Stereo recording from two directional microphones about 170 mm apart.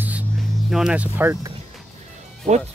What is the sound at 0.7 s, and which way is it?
Speech, 5° right (ahead or behind).